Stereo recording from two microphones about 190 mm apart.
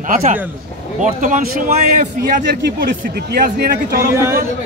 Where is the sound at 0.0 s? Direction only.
45° right (ahead or behind).